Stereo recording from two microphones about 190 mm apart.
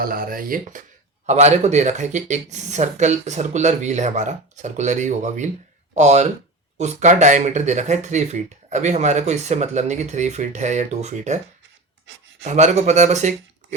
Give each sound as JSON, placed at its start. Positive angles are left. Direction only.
{"t": 0.0, "sound": "speech", "side_deg": -50}
{"t": 12.5, "sound": "speech", "side_deg": -40}